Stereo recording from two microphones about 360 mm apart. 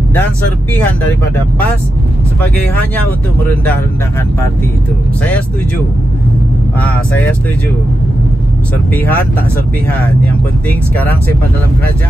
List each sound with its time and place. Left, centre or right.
8.9 s speech: centre